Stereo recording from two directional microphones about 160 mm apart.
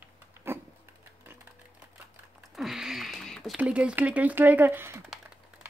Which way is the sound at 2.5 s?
Centre (ahead or behind).